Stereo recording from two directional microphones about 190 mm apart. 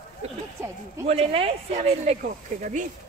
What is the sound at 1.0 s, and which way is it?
Speech, 30° right (ahead or behind).